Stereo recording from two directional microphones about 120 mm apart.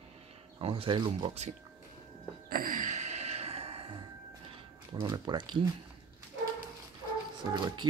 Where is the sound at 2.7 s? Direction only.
85° right; by 4.0 s 50° right (ahead or behind).